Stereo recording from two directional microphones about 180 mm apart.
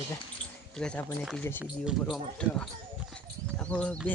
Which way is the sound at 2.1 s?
5° left (ahead or behind).